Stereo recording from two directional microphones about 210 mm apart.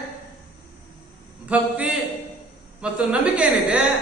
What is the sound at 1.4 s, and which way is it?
A man's voice, 5° right (ahead or behind).